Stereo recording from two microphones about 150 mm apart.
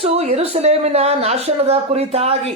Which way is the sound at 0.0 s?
40° right (ahead or behind).